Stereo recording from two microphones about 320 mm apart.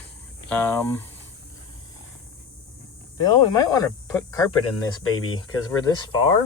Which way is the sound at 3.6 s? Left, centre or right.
Centre.